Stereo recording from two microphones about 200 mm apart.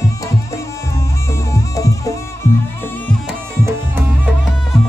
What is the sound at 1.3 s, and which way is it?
Music, 15° left (ahead or behind).